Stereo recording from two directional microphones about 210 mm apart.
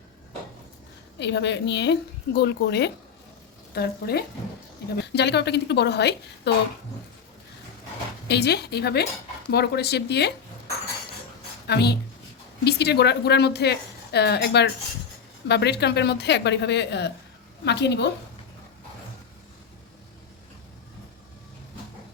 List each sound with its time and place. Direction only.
1.2 s a woman's voice: 55° left (ahead or behind)
8.3 s a woman's voice: 50° left (ahead or behind)
11.7 s a woman's voice: 50° left (ahead or behind)